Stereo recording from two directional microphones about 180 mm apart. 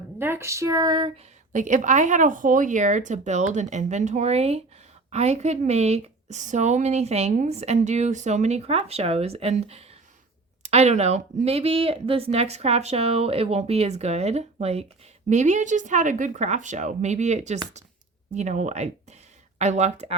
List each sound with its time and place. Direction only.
0.2 s speech: 15° right (ahead or behind)
1.5 s a woman's voice: 45° right (ahead or behind)